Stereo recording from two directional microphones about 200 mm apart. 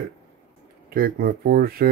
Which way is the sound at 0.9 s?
45° right (ahead or behind).